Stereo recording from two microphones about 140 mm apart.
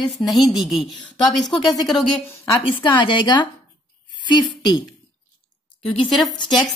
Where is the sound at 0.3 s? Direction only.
Centre (ahead or behind).